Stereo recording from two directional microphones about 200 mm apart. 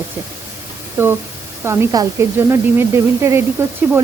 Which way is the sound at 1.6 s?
15° right (ahead or behind).